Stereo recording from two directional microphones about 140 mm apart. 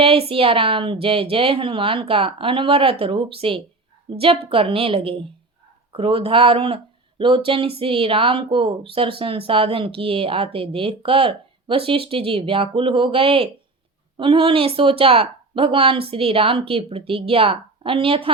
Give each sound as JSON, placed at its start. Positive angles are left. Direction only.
{"t": 0.0, "sound": "speech", "side_deg": -40}